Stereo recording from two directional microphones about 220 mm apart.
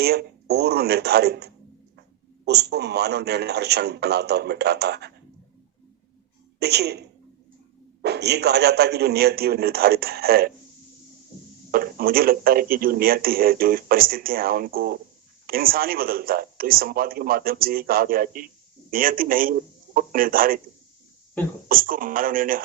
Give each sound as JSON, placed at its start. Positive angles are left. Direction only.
{"t": 0.0, "sound": "speech", "side_deg": -45}
{"t": 6.6, "sound": "speech", "side_deg": -50}
{"t": 8.0, "sound": "speech", "side_deg": -50}
{"t": 11.7, "sound": "a man's voice", "side_deg": -40}
{"t": 21.7, "sound": "a man's voice", "side_deg": -40}